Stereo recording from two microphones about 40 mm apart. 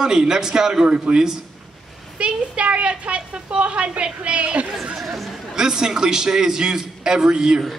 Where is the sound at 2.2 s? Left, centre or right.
Right.